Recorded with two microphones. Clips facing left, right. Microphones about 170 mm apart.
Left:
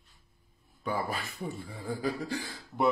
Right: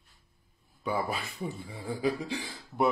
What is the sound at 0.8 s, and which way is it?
Speech, 10° right (ahead or behind).